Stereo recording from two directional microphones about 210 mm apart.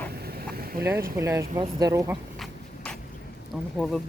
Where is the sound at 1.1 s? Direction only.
15° right (ahead or behind).